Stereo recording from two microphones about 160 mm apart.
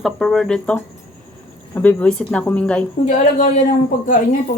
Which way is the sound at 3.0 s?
50° left (ahead or behind).